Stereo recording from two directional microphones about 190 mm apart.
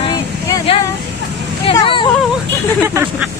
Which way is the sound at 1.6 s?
30° left (ahead or behind).